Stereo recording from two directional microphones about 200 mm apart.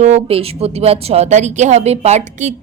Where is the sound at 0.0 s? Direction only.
30° right (ahead or behind).